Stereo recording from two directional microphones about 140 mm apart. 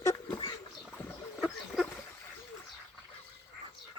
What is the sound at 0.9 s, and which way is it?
Boat, 10° left (ahead or behind).